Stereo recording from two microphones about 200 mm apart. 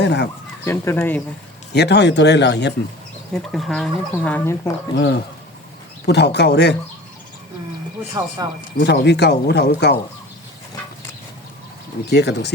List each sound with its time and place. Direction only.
0.0 s speech: 60° left (ahead or behind)
0.6 s speech: 15° left (ahead or behind)
1.7 s speech: 55° left (ahead or behind)
3.5 s speech: centre (ahead or behind)
4.9 s speech: 55° left (ahead or behind)
8.4 s speech: 20° right (ahead or behind)
8.8 s speech: 60° left (ahead or behind)
12.0 s speech: 55° left (ahead or behind)